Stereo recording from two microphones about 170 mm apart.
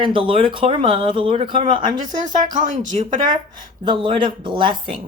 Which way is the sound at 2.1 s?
50° right (ahead or behind).